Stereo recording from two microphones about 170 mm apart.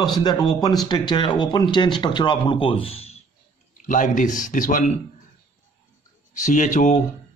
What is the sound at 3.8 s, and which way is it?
Speech, 50° left (ahead or behind).